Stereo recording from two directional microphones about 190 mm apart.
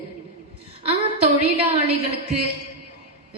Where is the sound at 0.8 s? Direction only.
35° right (ahead or behind).